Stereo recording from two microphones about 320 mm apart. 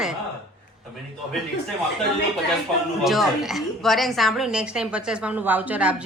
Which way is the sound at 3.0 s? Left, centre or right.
Centre.